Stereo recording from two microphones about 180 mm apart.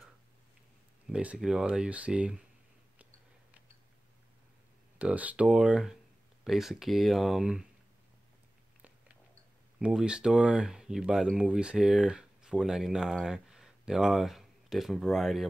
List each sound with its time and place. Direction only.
1.0 s speech: 5° right (ahead or behind)
4.9 s speech: 10° right (ahead or behind)
9.8 s speech: 5° right (ahead or behind)